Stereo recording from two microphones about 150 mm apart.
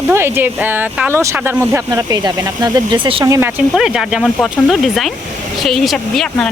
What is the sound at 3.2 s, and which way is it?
Speech, 20° right (ahead or behind).